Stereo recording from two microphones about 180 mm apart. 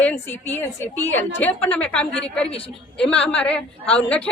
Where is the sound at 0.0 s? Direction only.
10° left (ahead or behind).